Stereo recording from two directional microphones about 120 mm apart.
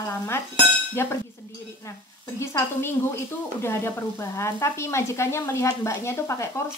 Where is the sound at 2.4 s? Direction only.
25° left (ahead or behind).